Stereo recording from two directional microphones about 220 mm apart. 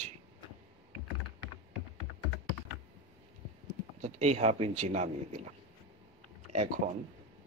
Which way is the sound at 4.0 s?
30° right (ahead or behind).